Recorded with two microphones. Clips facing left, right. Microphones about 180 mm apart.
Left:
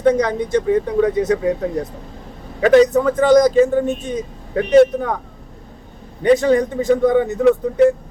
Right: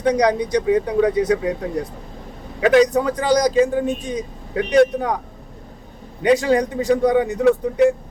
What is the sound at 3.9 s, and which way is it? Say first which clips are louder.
Speech: left 1 dB; 10° right (ahead or behind).